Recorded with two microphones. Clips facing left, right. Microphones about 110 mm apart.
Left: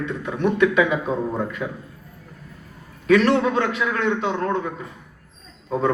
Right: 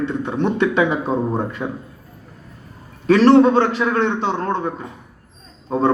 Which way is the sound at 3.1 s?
30° right (ahead or behind).